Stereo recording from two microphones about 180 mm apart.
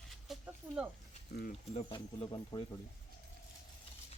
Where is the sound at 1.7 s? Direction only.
30° left (ahead or behind).